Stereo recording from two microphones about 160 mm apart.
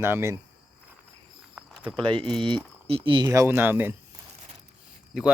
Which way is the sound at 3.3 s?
15° right (ahead or behind).